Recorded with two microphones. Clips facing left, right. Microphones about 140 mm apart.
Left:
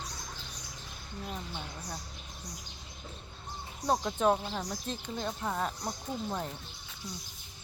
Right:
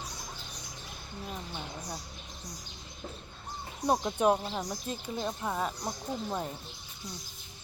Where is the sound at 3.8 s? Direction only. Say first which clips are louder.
Right 1 dB; 15° right (ahead or behind).